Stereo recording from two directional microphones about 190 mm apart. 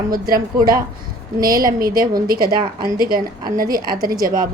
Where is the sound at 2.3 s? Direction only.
50° right (ahead or behind).